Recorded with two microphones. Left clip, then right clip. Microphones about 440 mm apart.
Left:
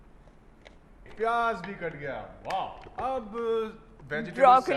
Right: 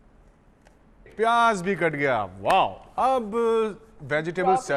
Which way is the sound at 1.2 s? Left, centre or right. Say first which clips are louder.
Right 7 dB; right.